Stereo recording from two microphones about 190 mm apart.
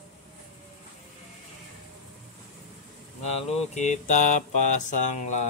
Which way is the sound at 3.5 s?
40° left (ahead or behind).